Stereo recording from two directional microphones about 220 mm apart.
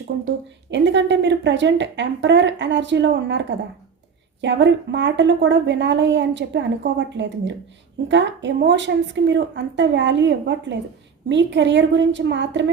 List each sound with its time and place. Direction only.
0.7 s a woman's voice: 55° right (ahead or behind)